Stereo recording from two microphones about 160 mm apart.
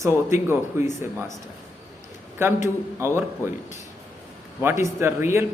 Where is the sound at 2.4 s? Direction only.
15° right (ahead or behind).